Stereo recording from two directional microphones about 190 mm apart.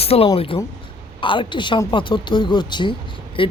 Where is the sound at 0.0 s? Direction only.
30° left (ahead or behind).